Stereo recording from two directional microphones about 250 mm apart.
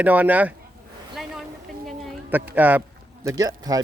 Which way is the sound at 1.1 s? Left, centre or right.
Centre.